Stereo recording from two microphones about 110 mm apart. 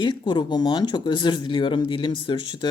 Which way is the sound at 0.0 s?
45° left (ahead or behind).